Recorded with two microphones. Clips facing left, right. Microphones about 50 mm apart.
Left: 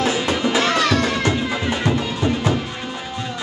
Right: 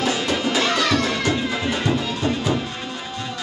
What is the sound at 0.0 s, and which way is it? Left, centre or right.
Music, centre.